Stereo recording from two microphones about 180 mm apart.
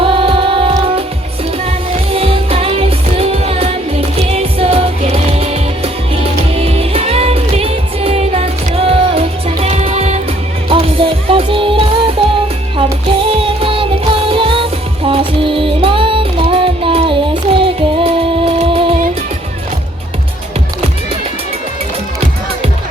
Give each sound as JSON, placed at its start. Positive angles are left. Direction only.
{"t": 0.0, "sound": "music", "side_deg": -30}
{"t": 2.1, "sound": "music", "side_deg": -30}